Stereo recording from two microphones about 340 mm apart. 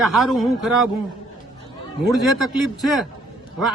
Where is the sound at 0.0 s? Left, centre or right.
Centre.